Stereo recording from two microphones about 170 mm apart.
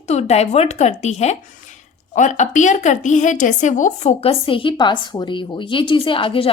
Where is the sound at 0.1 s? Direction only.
40° left (ahead or behind).